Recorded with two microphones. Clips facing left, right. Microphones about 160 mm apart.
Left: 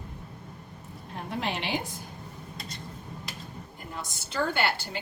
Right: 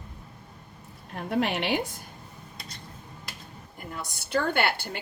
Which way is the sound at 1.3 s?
65° right (ahead or behind).